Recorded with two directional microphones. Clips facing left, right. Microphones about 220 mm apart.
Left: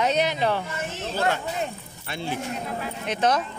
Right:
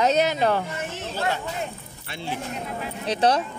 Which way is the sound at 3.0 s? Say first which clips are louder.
Right 2 dB; 35° right (ahead or behind).